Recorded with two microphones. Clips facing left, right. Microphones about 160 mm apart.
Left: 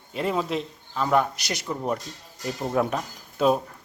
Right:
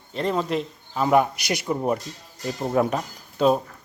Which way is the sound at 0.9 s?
10° right (ahead or behind).